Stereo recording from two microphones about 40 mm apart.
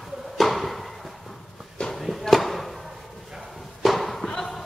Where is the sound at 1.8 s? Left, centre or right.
Centre.